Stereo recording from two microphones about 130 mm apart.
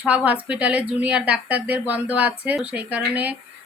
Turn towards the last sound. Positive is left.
turn(degrees=-10)  # may be behind; listen again after turning